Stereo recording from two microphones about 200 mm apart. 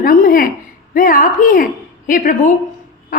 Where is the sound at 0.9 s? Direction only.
45° left (ahead or behind).